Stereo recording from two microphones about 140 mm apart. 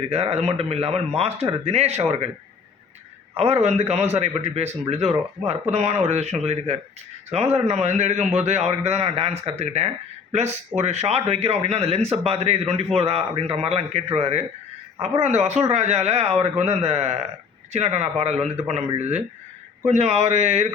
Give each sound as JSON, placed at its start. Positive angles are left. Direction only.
{"t": 0.1, "sound": "a man's voice", "side_deg": -45}
{"t": 3.3, "sound": "a man's voice", "side_deg": -50}